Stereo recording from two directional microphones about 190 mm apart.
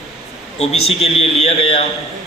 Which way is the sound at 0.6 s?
35° left (ahead or behind).